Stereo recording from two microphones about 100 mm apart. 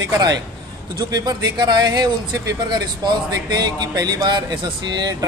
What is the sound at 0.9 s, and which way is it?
A man's voice, 45° right (ahead or behind).